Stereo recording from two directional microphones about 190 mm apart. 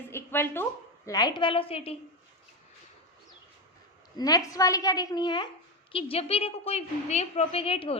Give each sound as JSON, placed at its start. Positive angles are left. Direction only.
{"t": 0.1, "sound": "a woman's voice", "side_deg": 10}
{"t": 4.2, "sound": "a woman's voice", "side_deg": 20}